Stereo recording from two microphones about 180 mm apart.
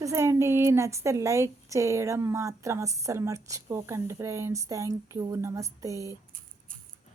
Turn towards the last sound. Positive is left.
turn(degrees=-15)  # may be behind; listen again after turning